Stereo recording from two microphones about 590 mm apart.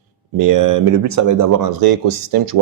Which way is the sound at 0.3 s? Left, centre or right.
Right.